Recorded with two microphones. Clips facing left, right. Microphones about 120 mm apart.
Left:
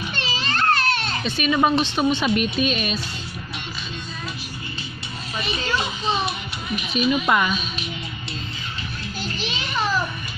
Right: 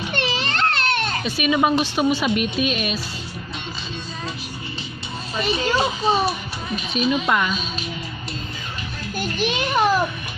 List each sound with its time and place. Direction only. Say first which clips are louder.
0.1 s children playing: right 5 dB; 60° right (ahead or behind)
1.2 s a woman's voice: even; 10° right (ahead or behind)
5.4 s a child's voice: right 5 dB; 40° right (ahead or behind)
6.9 s a woman's voice: even; centre (ahead or behind)
9.1 s a sound: right 8 dB; 55° right (ahead or behind)